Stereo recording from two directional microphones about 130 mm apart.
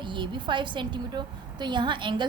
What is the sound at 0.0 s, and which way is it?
A woman's voice, 35° right (ahead or behind).